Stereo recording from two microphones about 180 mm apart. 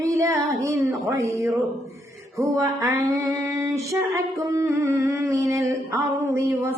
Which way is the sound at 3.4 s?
15° right (ahead or behind).